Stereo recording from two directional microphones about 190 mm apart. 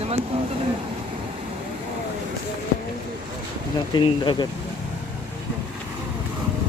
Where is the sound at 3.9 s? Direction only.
25° left (ahead or behind).